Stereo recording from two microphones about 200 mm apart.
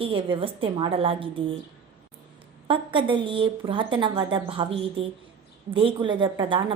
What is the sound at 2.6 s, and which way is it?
A woman's voice, 25° right (ahead or behind).